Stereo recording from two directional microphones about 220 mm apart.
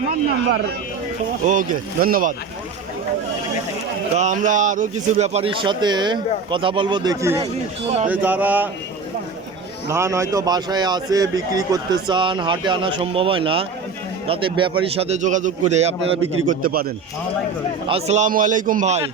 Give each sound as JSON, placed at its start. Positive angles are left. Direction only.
{"t": 1.5, "sound": "a man's voice", "side_deg": -40}
{"t": 4.1, "sound": "a man's voice", "side_deg": -35}
{"t": 8.0, "sound": "a sound", "side_deg": -5}
{"t": 9.9, "sound": "a man's voice", "side_deg": -15}
{"t": 16.5, "sound": "a man's voice", "side_deg": -40}
{"t": 17.8, "sound": "a man's voice", "side_deg": -25}